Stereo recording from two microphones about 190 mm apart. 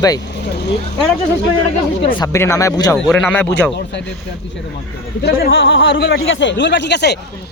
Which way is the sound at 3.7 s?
65° left (ahead or behind).